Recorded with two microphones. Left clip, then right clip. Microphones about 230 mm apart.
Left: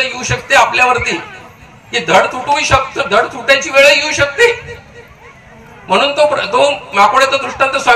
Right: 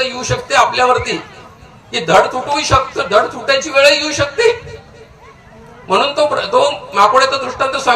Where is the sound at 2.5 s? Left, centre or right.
Right.